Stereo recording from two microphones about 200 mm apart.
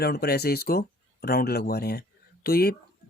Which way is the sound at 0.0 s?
50° left (ahead or behind).